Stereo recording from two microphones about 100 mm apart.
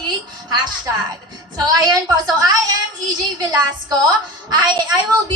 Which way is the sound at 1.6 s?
40° right (ahead or behind).